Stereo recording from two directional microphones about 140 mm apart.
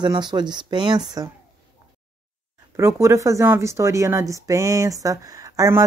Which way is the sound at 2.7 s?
20° right (ahead or behind).